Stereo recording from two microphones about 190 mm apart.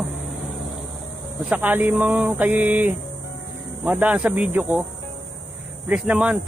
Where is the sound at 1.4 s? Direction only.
10° right (ahead or behind).